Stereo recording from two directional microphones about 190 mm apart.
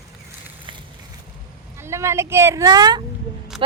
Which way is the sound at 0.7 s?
25° right (ahead or behind).